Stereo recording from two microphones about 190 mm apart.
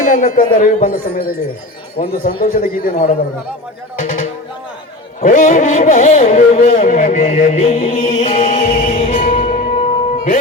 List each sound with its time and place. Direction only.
0.0 s speech: 40° left (ahead or behind)
2.9 s speech: 35° left (ahead or behind)
5.2 s a sound: 45° left (ahead or behind)
8.9 s music: 35° left (ahead or behind)